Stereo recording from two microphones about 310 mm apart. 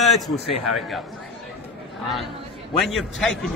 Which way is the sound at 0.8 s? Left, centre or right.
Centre.